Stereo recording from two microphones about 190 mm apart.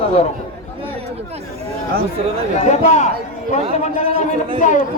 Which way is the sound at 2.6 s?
35° left (ahead or behind).